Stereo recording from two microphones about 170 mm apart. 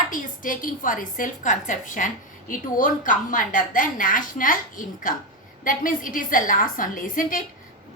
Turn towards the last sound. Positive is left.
turn(degrees=50)  # may be behind; listen again after turning